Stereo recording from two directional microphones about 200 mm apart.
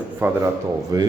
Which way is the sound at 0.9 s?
20° right (ahead or behind).